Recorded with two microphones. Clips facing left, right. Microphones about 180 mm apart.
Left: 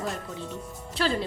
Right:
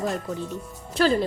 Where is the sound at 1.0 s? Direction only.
45° right (ahead or behind).